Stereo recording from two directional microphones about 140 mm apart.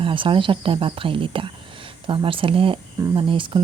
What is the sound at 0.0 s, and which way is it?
Speech, 35° right (ahead or behind).